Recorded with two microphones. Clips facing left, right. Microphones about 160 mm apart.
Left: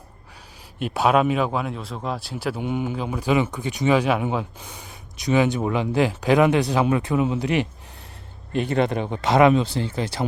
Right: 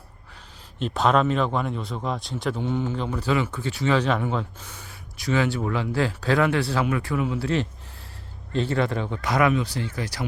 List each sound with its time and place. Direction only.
0.8 s speech: 10° left (ahead or behind); by 10.2 s 25° left (ahead or behind)